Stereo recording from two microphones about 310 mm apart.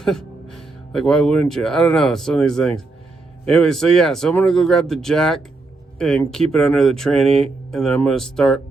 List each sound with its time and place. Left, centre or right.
0.0 s speech: centre